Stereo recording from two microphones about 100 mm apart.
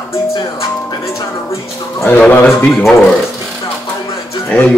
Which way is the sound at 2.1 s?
15° left (ahead or behind).